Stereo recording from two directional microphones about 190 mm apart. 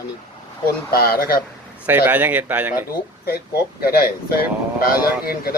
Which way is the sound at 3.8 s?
55° left (ahead or behind).